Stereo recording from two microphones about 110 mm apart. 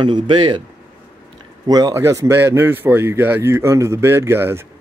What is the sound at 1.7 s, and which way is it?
A man's voice, 35° right (ahead or behind).